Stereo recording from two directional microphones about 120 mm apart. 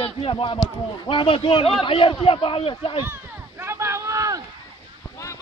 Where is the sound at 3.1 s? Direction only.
20° right (ahead or behind).